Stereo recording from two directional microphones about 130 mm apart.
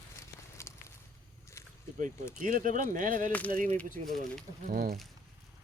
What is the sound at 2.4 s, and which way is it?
Speech, 90° right.